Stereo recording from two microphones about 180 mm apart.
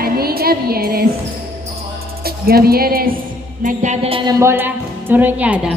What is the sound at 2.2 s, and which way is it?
Speech, 55° right (ahead or behind).